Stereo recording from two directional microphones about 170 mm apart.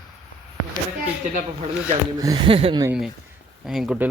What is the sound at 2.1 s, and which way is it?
Speech, 20° right (ahead or behind).